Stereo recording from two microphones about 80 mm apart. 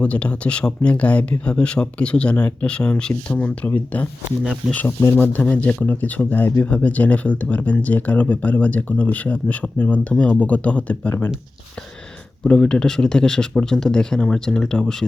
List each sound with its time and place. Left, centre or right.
0.0 s speech: centre
4.9 s speech: left
5.1 s speech: left
12.5 s speech: centre